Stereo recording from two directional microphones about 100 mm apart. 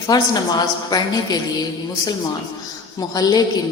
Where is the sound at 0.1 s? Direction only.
40° left (ahead or behind).